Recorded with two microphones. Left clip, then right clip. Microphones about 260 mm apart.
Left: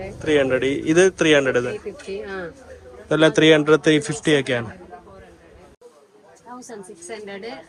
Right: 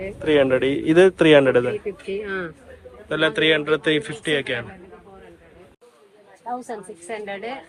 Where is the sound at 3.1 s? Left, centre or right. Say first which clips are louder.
Left 4 dB; centre.